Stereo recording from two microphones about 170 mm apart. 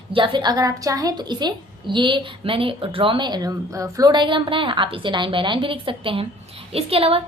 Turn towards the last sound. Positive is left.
turn(degrees=-35)  # may be behind; listen again after turning